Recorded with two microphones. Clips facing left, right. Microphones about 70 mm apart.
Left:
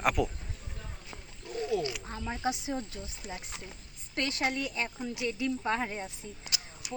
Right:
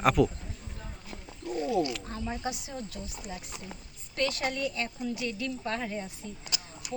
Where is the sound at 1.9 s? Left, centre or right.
Centre.